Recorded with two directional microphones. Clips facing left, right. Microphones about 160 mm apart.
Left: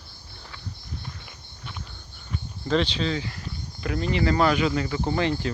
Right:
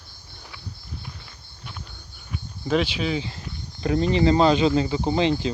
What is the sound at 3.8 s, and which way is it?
Speech, 30° right (ahead or behind).